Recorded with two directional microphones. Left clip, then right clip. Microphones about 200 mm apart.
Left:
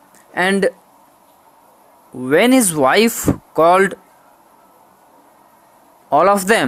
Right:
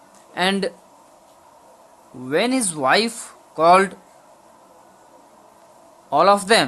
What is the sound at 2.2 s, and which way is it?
Speech, 35° left (ahead or behind).